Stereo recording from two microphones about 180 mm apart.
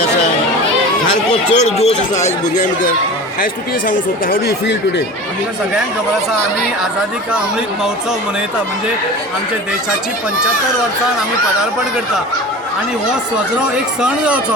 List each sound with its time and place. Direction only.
1.3 s speech: 40° left (ahead or behind); by 4.5 s 55° left (ahead or behind)
13.3 s speech: 5° right (ahead or behind)